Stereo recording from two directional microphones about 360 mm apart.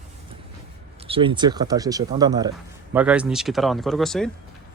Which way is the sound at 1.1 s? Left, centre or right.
Centre.